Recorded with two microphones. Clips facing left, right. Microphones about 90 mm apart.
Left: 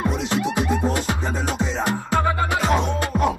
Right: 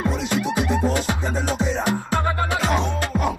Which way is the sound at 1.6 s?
10° right (ahead or behind).